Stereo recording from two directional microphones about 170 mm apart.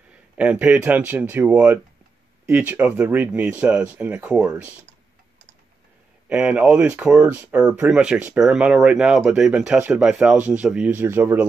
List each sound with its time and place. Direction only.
0.4 s speech: 10° right (ahead or behind)
6.2 s speech: 5° right (ahead or behind)